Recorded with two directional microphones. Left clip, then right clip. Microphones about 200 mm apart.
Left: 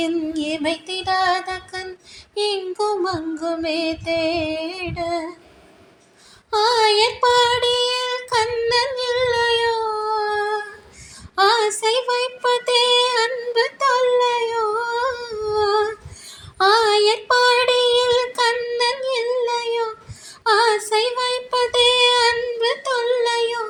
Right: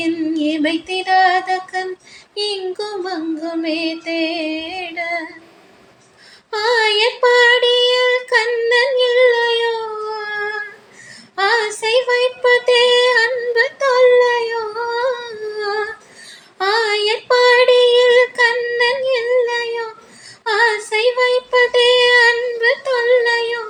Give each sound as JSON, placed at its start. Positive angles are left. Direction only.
{"t": 0.0, "sound": "music", "side_deg": 35}
{"t": 2.3, "sound": "child singing", "side_deg": 30}
{"t": 6.5, "sound": "child singing", "side_deg": 30}
{"t": 9.2, "sound": "a sound", "side_deg": 35}
{"t": 11.3, "sound": "female singing", "side_deg": 35}
{"t": 18.8, "sound": "a sound", "side_deg": 35}
{"t": 20.5, "sound": "female singing", "side_deg": 30}